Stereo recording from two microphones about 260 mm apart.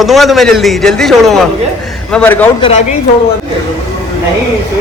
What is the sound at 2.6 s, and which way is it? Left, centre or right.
Speech, left.